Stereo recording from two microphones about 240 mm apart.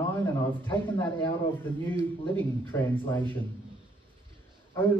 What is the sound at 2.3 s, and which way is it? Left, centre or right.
A man's voice, centre.